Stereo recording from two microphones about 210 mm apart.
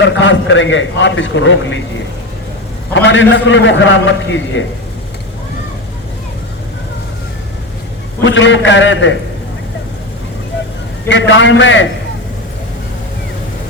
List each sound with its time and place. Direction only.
0.0 s a man's voice: 60° left (ahead or behind)
2.9 s a man's voice: 60° left (ahead or behind)
8.2 s a man's voice: 60° left (ahead or behind)
11.1 s a man's voice: 60° left (ahead or behind)